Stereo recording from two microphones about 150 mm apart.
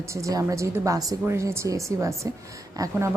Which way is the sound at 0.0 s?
20° right (ahead or behind).